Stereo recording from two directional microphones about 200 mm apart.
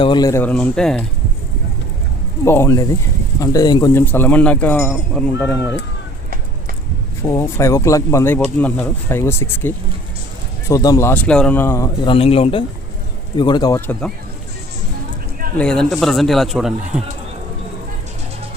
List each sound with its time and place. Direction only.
0.0 s speech: 20° left (ahead or behind); by 1.0 s 5° left (ahead or behind)
2.4 s speech: 15° left (ahead or behind)
7.3 s speech: 15° left (ahead or behind)
12.0 s speech: 30° left (ahead or behind); by 14.1 s 10° left (ahead or behind)
15.5 s speech: 5° left (ahead or behind)